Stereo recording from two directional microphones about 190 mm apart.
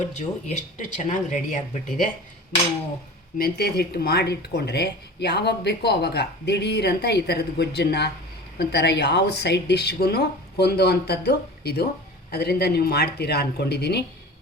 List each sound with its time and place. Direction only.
0.1 s speech: 35° left (ahead or behind)
3.3 s speech: 55° left (ahead or behind)